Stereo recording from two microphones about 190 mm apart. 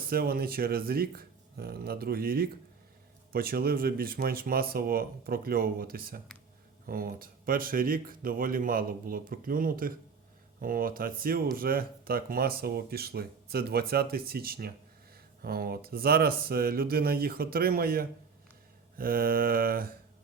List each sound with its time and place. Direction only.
0.1 s speech: 50° right (ahead or behind)